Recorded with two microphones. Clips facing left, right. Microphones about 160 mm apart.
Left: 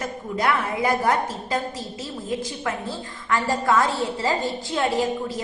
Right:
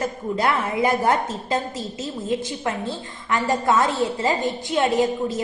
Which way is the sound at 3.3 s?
20° right (ahead or behind).